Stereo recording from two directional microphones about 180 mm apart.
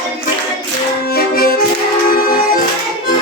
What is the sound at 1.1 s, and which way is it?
Music, 55° left (ahead or behind).